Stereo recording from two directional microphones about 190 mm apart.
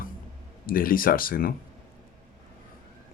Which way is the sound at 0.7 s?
50° left (ahead or behind).